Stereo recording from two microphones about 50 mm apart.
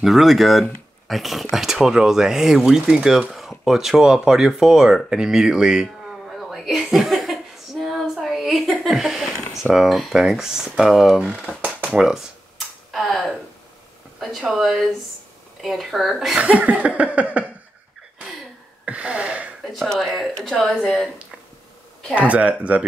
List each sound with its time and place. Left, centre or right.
0.0 s speech: centre
7.1 s a sound: centre
9.8 s speech: centre
11.6 s cutlery: centre
12.1 s a sound: centre
12.9 s speech: centre
14.5 s speech: centre
16.3 s laughter: right
18.9 s gasp: right
19.7 s a woman's voice: centre
22.3 s laughter: right